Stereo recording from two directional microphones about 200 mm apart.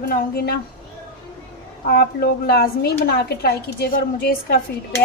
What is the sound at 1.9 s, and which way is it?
Speech, 50° left (ahead or behind).